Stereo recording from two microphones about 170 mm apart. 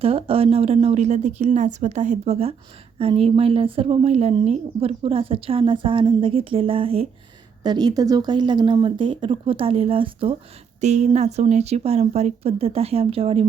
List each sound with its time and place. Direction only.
0.0 s speech: 35° right (ahead or behind)
10.8 s speech: 45° right (ahead or behind)